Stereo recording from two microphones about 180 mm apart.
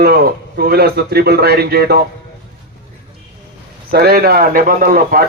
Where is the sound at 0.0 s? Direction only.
60° right (ahead or behind).